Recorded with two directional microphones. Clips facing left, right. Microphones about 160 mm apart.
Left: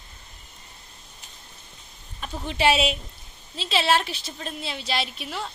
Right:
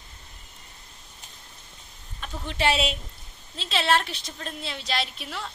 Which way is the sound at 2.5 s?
5° left (ahead or behind).